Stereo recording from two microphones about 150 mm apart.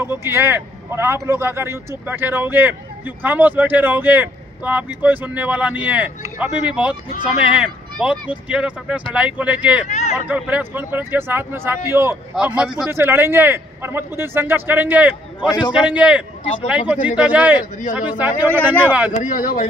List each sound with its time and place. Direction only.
0.0 s speech: 15° right (ahead or behind)
9.8 s a sound: 50° left (ahead or behind)
10.1 s speech: 10° right (ahead or behind)
19.1 s speech: 60° left (ahead or behind)